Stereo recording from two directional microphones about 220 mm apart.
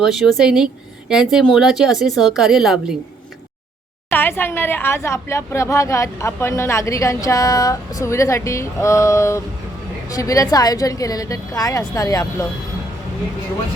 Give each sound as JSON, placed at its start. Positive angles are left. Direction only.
{"t": 0.0, "sound": "speech", "side_deg": 0}
{"t": 4.1, "sound": "a woman's voice", "side_deg": 10}